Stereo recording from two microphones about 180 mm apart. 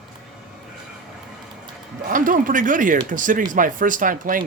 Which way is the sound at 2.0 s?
50° right (ahead or behind).